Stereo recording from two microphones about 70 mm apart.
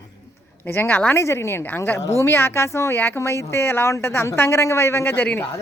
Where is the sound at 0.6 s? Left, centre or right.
Left.